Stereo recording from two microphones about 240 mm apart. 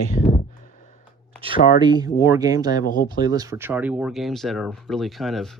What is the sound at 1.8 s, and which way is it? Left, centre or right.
Speech, centre.